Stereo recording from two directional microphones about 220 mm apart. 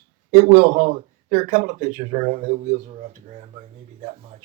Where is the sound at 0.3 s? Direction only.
30° right (ahead or behind).